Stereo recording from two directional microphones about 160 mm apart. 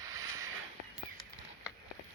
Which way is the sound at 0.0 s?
20° right (ahead or behind).